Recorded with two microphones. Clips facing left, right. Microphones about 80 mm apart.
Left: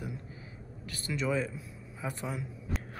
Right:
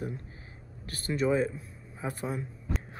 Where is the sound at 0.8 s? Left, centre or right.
Right.